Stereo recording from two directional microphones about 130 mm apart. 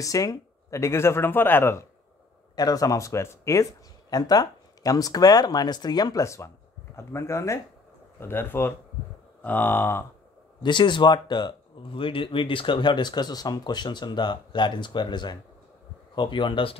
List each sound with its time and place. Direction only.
0.0 s speech: 25° left (ahead or behind)
10.6 s speech: 35° left (ahead or behind)